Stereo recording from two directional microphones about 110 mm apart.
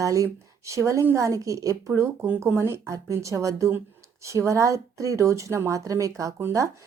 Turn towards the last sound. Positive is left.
turn(degrees=-30)  # may be behind; listen again after turning